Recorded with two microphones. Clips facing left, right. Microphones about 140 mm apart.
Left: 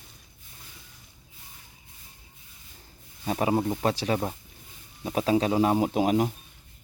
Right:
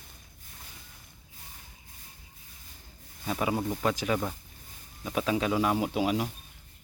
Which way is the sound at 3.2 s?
35° left (ahead or behind).